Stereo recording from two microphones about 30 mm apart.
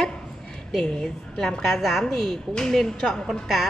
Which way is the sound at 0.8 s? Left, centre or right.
Left.